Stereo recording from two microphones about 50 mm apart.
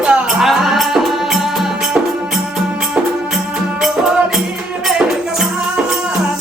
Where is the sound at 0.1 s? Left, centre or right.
Centre.